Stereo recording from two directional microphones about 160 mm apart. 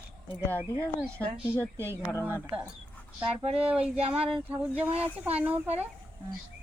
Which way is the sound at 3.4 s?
40° right (ahead or behind).